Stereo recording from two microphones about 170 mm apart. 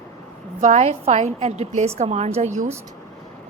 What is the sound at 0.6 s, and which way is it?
A woman's voice, 45° right (ahead or behind).